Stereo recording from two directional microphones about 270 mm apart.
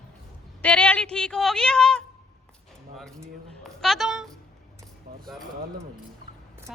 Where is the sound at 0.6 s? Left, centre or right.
Centre.